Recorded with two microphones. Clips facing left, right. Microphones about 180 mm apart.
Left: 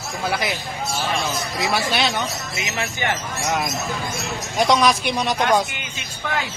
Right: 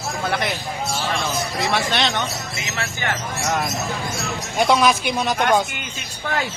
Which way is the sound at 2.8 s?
15° left (ahead or behind).